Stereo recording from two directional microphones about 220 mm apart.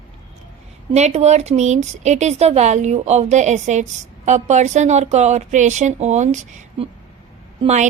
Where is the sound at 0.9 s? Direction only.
30° right (ahead or behind).